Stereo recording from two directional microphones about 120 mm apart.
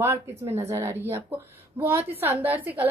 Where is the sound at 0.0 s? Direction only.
20° right (ahead or behind).